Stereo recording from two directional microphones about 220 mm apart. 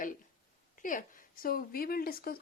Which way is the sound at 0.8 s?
35° left (ahead or behind).